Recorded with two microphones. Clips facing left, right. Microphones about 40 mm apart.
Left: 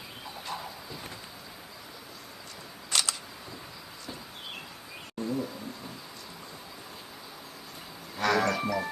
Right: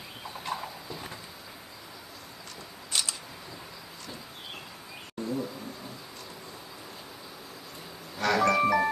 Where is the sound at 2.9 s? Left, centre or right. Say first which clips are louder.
Left 3 dB; left.